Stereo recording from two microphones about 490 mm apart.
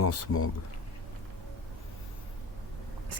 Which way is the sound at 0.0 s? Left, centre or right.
Left.